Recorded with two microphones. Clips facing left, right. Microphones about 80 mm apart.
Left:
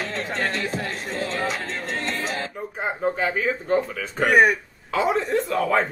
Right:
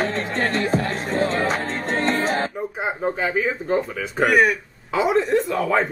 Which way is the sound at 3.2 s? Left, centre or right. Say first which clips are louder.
Right 1 dB; centre.